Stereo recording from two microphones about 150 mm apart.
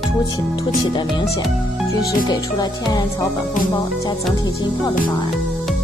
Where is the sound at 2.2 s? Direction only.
25° left (ahead or behind).